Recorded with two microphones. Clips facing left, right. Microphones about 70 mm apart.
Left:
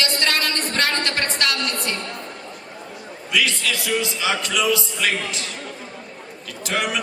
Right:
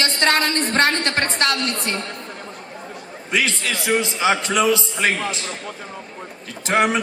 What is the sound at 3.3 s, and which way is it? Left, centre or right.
A woman's voice, right.